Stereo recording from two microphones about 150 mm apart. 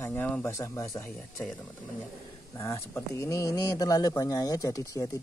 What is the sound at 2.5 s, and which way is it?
Speech, 20° left (ahead or behind).